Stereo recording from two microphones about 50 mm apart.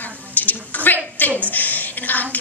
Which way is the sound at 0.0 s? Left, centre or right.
Left.